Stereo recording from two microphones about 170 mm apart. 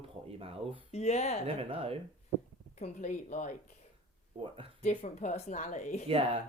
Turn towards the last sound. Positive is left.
turn(degrees=-35)  # may be behind; listen again after turning